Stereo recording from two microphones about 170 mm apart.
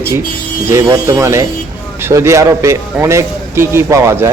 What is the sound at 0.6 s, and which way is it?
A man's voice, 15° right (ahead or behind).